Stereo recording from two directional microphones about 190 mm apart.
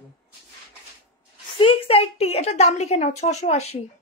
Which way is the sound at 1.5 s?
25° left (ahead or behind).